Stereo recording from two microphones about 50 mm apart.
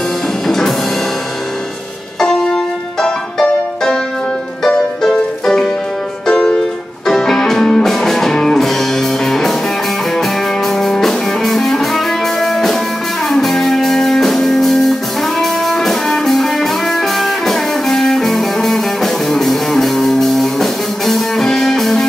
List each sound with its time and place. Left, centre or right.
0.5 s music: centre
2.1 s music: centre